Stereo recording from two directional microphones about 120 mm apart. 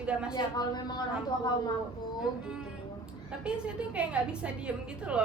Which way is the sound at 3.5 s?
10° right (ahead or behind).